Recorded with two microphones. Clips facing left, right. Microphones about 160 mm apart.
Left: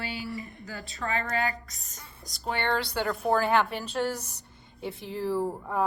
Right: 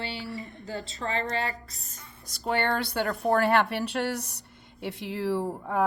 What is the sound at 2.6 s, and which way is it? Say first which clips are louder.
Speech: right 1 dB; 45° right (ahead or behind).